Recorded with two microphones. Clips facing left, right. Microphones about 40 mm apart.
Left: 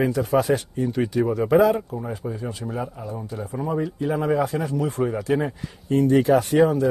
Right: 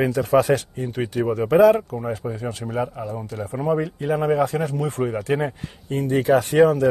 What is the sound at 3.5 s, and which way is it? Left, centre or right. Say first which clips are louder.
Speech: right 3 dB; right.